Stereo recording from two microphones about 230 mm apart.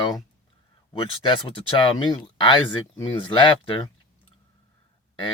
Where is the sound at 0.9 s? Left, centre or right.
Left.